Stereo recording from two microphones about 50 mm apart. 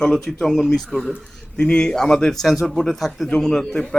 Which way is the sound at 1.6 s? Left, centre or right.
Centre.